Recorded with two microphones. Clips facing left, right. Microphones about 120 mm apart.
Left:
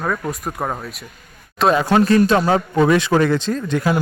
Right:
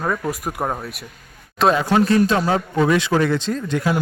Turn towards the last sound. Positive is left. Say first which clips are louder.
# left 2 dB
turn(degrees=50)  # may be behind; listen again after turning